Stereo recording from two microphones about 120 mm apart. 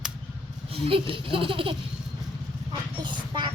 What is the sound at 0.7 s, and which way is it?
Speech, 50° right (ahead or behind).